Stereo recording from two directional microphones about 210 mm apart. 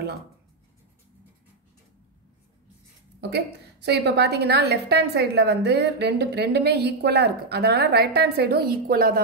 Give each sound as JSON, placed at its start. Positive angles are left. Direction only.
{"t": 3.2, "sound": "a woman's voice", "side_deg": -50}